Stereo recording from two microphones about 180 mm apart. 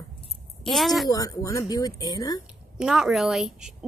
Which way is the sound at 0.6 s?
Centre (ahead or behind).